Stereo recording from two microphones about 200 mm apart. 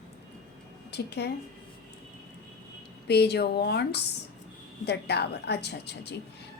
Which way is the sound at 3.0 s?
55° left (ahead or behind).